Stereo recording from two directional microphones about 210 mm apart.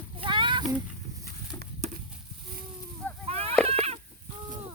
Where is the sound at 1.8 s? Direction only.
30° right (ahead or behind).